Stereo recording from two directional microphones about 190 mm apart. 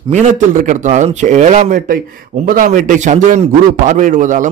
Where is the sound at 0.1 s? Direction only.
40° right (ahead or behind).